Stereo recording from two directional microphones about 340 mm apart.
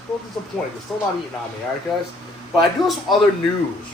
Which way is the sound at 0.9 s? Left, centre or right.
Centre.